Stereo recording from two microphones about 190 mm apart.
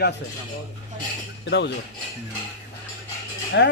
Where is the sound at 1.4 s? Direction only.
65° left (ahead or behind).